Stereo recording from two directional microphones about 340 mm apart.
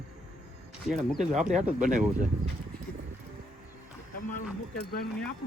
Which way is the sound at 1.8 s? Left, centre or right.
Right.